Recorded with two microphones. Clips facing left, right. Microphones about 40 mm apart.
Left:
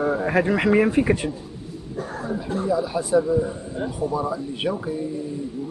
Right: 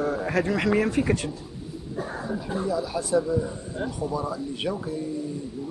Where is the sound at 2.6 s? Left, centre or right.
Centre.